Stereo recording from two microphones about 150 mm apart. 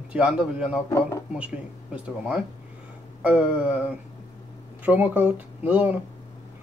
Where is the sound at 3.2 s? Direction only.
10° right (ahead or behind).